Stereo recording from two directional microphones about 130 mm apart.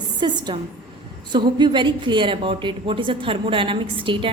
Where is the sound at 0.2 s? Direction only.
35° right (ahead or behind).